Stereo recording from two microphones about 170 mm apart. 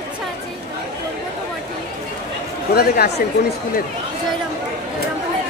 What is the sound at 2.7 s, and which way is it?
Speech, 65° left (ahead or behind).